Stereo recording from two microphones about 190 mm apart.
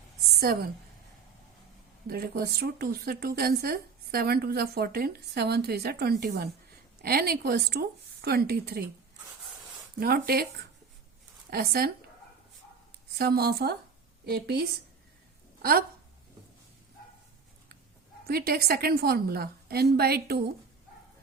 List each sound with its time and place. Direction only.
0.3 s a woman's voice: 55° right (ahead or behind)
2.0 s a woman's voice: 50° right (ahead or behind)
10.0 s a woman's voice: 55° right (ahead or behind)
11.5 s a woman's voice: 50° right (ahead or behind)
13.1 s a woman's voice: 55° right (ahead or behind)
18.3 s a woman's voice: 55° right (ahead or behind)